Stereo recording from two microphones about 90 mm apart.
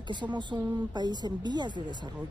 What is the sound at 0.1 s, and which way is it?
A woman's voice, 60° right (ahead or behind).